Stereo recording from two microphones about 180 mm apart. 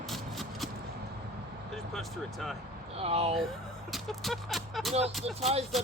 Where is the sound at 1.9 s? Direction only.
Centre (ahead or behind).